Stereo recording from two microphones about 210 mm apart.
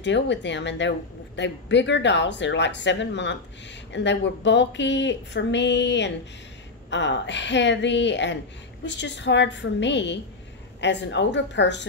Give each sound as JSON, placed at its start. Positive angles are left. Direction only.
{"t": 0.0, "sound": "a woman's voice", "side_deg": 55}